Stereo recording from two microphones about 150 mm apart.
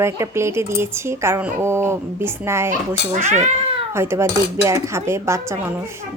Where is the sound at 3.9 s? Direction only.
15° right (ahead or behind).